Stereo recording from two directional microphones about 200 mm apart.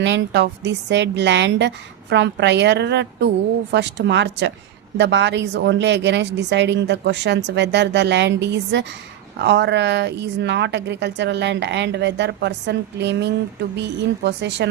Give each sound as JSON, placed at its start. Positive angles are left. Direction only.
{"t": 0.0, "sound": "a woman's voice", "side_deg": -60}